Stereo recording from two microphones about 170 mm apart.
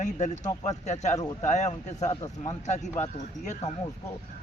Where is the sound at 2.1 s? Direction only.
25° left (ahead or behind).